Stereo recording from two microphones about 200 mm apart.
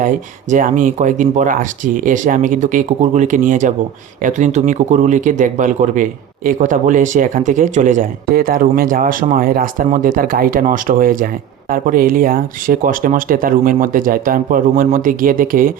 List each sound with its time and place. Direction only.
0.5 s speech: 40° right (ahead or behind)